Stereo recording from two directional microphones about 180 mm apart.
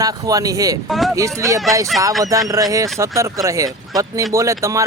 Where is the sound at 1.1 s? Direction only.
15° right (ahead or behind).